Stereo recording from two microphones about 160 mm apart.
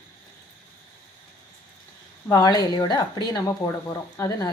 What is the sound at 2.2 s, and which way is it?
A woman's voice, 20° left (ahead or behind).